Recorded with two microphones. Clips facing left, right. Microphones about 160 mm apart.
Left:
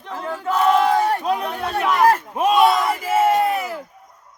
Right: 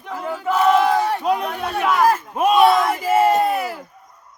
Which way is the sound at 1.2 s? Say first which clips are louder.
Right 2 dB; 5° right (ahead or behind).